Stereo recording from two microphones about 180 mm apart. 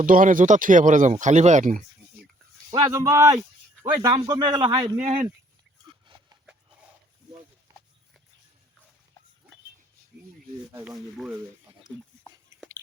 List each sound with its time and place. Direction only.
0.0 s speech: 50° right (ahead or behind)
2.6 s speech: 20° right (ahead or behind)
10.8 s speech: 5° right (ahead or behind)